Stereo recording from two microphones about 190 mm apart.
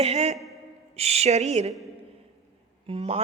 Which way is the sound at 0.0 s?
35° right (ahead or behind).